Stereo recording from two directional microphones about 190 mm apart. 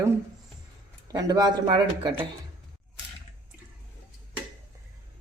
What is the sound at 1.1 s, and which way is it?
A man's voice, 20° right (ahead or behind).